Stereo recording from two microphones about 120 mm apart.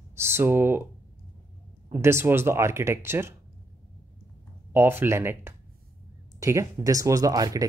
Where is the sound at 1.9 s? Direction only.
20° right (ahead or behind).